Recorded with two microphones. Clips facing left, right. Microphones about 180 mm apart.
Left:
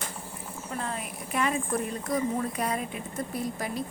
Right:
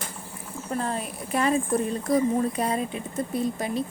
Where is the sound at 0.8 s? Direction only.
35° right (ahead or behind).